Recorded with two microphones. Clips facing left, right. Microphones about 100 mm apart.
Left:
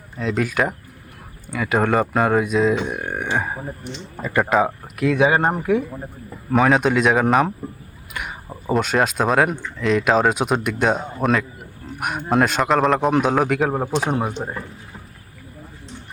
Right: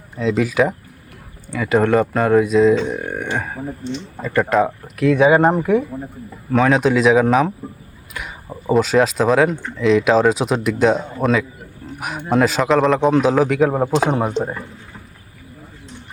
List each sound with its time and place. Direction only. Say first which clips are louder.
0.2 s speech: right 4 dB; centre (ahead or behind)
2.7 s speech: right 4 dB; 15° left (ahead or behind)
3.0 s speech: right 1 dB; centre (ahead or behind)
3.2 s speech: even; 15° left (ahead or behind)
8.1 s a sound: even; centre (ahead or behind)
8.6 s speech: right 4 dB; centre (ahead or behind)
14.4 s speech: right 7 dB; 90° right